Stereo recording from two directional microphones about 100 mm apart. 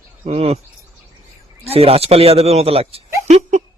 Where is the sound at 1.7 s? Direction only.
85° right.